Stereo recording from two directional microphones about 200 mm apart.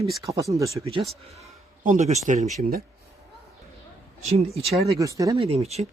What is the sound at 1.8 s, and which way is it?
Speech, 40° right (ahead or behind).